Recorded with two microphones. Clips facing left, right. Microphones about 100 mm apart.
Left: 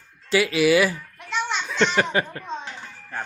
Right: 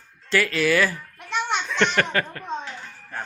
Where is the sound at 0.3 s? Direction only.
15° left (ahead or behind).